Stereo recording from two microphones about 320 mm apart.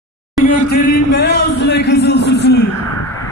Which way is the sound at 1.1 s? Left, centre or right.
Left.